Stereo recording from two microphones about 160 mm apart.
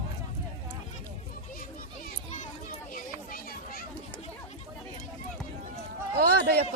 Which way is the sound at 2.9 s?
60° left (ahead or behind).